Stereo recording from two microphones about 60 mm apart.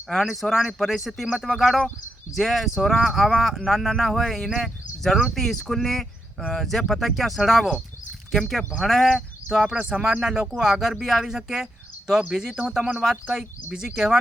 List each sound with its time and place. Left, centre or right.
0.1 s speech: centre
9.6 s speech: centre